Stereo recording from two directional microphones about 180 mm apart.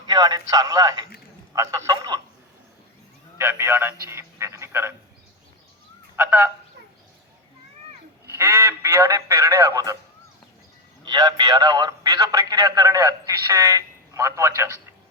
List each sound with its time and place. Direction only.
0.1 s a man's voice: 20° right (ahead or behind)
3.3 s speech: 10° right (ahead or behind)
8.4 s speech: 10° right (ahead or behind)
11.0 s a man's voice: 25° right (ahead or behind)